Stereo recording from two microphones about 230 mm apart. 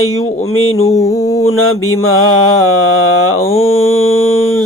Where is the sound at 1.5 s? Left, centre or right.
Left.